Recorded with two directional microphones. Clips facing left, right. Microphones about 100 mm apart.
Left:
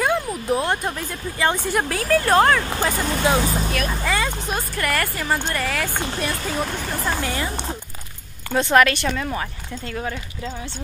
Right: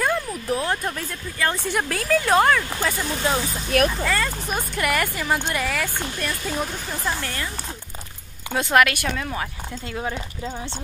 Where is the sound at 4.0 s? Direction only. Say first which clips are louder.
Left 1 dB; 10° left (ahead or behind).